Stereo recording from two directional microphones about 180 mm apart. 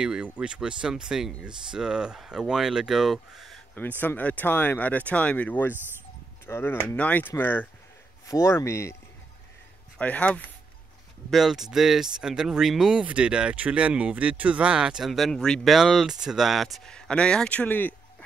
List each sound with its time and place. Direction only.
0.0 s speech: 5° right (ahead or behind); by 8.9 s 15° left (ahead or behind)
9.9 s speech: 5° left (ahead or behind)